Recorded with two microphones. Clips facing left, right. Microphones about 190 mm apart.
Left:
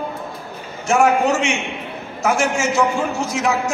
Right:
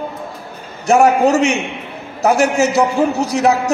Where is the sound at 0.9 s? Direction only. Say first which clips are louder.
Right 4 dB; 40° right (ahead or behind).